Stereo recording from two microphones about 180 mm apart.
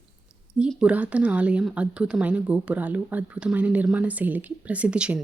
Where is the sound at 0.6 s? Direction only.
5° right (ahead or behind).